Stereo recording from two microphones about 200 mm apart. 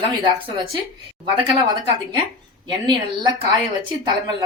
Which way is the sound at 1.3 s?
25° right (ahead or behind).